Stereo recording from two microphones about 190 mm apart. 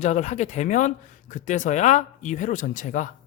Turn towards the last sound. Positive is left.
turn(degrees=45)  # may be behind; listen again after turning